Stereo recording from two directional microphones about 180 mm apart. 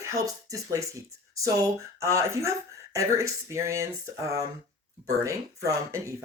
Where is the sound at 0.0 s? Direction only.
20° right (ahead or behind).